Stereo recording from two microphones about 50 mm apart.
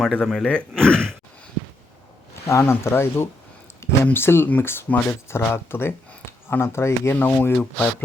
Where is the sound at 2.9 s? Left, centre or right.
Left.